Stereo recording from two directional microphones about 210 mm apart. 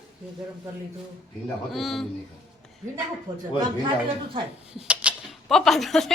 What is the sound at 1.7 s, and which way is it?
Speech, centre (ahead or behind).